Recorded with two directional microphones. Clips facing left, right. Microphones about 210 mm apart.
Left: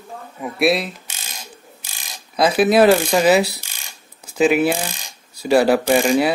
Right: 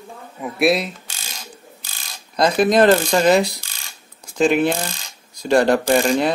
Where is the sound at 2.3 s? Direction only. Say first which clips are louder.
Left 1 dB; 5° left (ahead or behind).